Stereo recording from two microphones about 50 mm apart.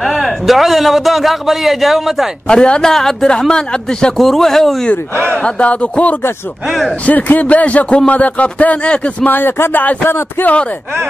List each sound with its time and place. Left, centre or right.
0.0 s a man's voice: centre
2.4 s a man's voice: centre
2.9 s a man's voice: centre
5.3 s a man's voice: left
9.7 s speech: left
10.4 s a man's voice: left